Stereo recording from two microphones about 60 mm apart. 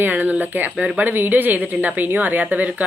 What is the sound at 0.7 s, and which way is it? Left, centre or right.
Speech, centre.